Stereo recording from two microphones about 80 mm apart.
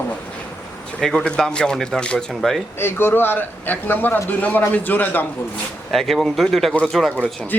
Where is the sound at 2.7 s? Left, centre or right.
Left.